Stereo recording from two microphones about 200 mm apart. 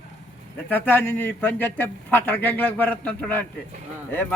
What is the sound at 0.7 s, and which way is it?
A man's voice, 10° left (ahead or behind).